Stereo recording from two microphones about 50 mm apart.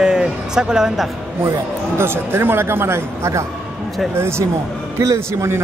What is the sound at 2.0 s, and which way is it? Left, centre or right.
Speech, right.